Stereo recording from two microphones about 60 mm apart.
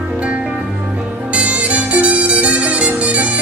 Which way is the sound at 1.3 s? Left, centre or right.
Right.